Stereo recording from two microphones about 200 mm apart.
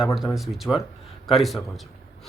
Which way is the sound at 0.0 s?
Centre (ahead or behind).